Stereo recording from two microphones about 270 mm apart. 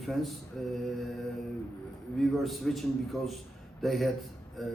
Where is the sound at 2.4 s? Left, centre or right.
Centre.